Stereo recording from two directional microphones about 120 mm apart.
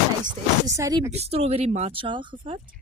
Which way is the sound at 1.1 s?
60° right (ahead or behind).